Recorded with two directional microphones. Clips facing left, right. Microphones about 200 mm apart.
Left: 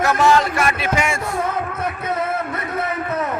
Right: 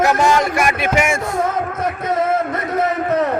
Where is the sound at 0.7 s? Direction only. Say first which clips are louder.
Right 4 dB; 55° right (ahead or behind); by 3.4 s 35° right (ahead or behind).